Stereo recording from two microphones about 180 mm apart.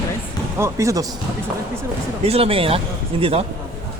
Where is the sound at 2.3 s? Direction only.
30° right (ahead or behind).